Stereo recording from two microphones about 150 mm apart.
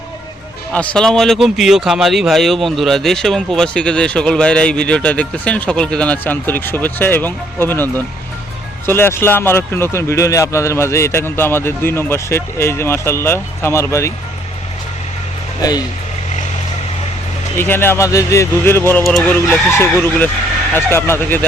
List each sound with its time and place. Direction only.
0.7 s speech: 5° left (ahead or behind)
17.6 s speech: 15° left (ahead or behind)
19.0 s speech: 5° left (ahead or behind)